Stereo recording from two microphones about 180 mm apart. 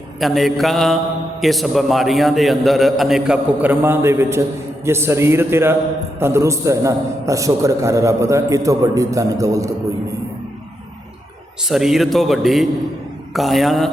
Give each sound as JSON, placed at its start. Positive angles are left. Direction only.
{"t": 0.2, "sound": "a man's voice", "side_deg": 0}
{"t": 11.7, "sound": "a man's voice", "side_deg": 0}